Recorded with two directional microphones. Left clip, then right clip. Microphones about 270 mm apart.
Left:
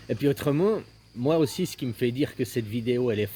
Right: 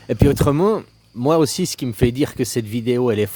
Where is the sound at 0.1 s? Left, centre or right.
Right.